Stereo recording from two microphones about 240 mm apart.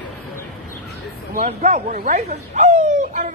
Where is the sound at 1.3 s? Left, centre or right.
Right.